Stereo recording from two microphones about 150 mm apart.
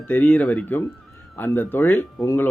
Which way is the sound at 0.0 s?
10° left (ahead or behind).